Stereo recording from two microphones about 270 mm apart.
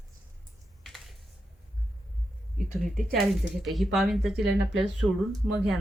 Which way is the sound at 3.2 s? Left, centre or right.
Centre.